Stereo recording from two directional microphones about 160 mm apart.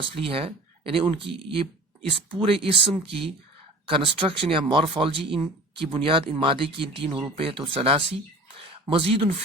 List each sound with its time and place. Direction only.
0.0 s speech: 35° right (ahead or behind)